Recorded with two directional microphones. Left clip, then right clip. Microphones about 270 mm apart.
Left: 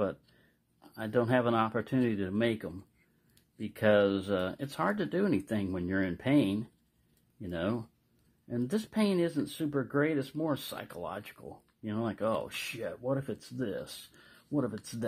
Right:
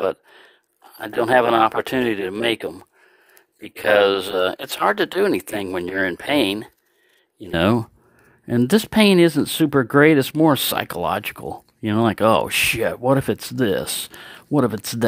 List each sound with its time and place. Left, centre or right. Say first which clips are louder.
1.0 s speech: right 12 dB; right
3.9 s speech: right 13 dB; right